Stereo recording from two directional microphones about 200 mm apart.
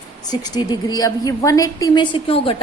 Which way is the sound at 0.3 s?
20° left (ahead or behind).